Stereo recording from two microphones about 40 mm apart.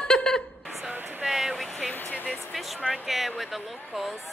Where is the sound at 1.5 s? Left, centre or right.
Centre.